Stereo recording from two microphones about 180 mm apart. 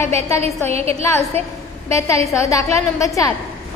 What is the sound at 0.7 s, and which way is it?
Speech, 35° right (ahead or behind).